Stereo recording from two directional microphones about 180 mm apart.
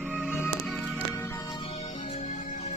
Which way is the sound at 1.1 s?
15° left (ahead or behind).